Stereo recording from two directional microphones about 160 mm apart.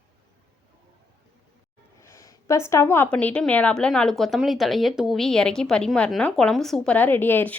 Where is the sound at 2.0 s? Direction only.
20° left (ahead or behind).